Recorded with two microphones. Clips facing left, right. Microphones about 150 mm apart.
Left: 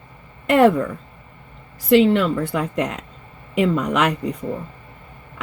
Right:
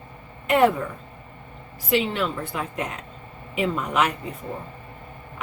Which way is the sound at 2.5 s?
80° left.